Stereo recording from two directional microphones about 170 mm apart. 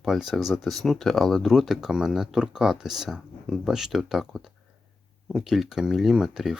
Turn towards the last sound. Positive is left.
turn(degrees=0)  # may be behind; listen again after turning